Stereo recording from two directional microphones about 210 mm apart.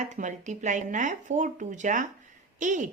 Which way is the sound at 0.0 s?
35° right (ahead or behind).